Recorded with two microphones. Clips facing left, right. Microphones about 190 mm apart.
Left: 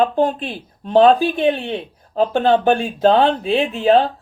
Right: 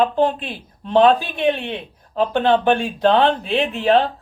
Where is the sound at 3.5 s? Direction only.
30° left (ahead or behind).